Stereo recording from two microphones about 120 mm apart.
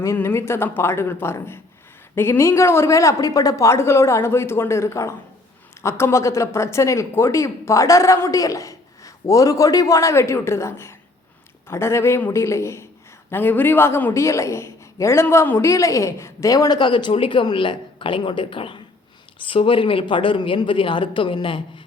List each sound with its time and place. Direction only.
0.0 s a woman's voice: 20° left (ahead or behind); by 21.6 s 45° left (ahead or behind)